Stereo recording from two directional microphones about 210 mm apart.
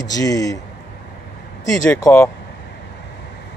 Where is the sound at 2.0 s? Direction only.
10° left (ahead or behind).